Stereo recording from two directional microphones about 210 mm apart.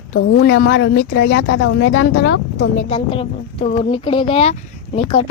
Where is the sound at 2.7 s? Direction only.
25° left (ahead or behind).